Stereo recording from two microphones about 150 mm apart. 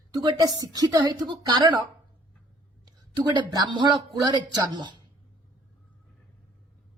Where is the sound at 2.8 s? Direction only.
30° right (ahead or behind).